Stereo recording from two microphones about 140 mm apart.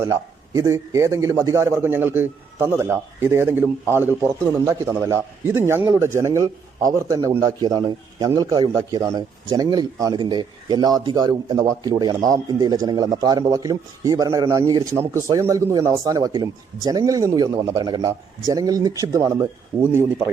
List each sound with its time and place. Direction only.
0.0 s a man's voice: 25° right (ahead or behind)
7.6 s a man's voice: 35° right (ahead or behind); by 20.3 s 20° right (ahead or behind)